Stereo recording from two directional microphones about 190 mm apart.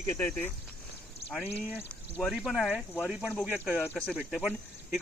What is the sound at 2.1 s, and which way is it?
A man's voice, 5° right (ahead or behind).